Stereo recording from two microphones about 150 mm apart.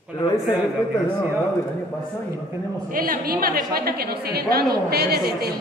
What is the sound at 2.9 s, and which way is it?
A woman's voice, 70° right (ahead or behind).